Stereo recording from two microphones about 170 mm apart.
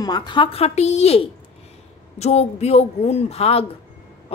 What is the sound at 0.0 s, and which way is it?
Speech, 25° left (ahead or behind).